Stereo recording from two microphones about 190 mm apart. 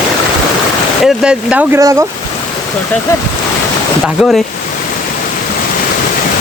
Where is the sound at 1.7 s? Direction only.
15° right (ahead or behind).